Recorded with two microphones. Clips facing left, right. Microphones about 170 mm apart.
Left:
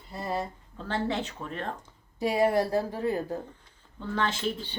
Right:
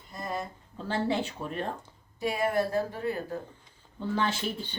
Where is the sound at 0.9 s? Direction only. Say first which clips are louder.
Right 1 dB; 10° right (ahead or behind).